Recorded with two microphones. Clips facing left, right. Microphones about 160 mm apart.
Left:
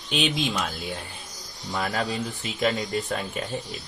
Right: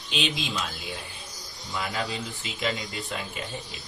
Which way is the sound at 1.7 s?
45° left (ahead or behind).